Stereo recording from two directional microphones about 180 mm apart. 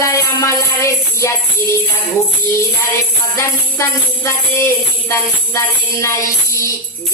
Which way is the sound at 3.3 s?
15° left (ahead or behind).